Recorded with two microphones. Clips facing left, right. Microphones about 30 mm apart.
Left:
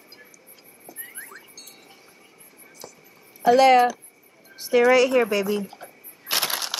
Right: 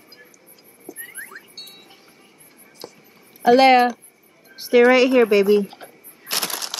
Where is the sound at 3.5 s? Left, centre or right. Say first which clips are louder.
Right 2 dB; right.